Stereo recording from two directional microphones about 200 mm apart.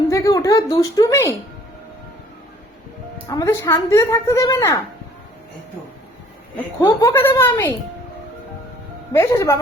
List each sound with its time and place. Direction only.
0.1 s a woman's voice: 15° left (ahead or behind)
3.2 s a woman's voice: 15° left (ahead or behind)
6.8 s a woman's voice: 15° left (ahead or behind)
9.1 s a woman's voice: 15° left (ahead or behind)